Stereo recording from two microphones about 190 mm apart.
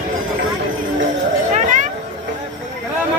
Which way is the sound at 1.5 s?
40° right (ahead or behind).